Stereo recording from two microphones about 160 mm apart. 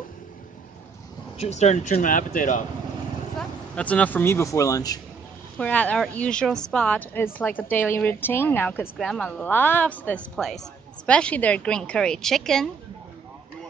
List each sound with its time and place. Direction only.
1.4 s speech: 45° left (ahead or behind)
3.3 s speech: 10° left (ahead or behind)
5.6 s a woman's voice: 10° left (ahead or behind)